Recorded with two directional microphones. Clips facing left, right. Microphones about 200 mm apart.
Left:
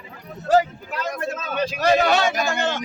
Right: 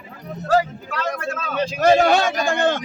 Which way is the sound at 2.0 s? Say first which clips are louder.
Right 2 dB; 50° right (ahead or behind).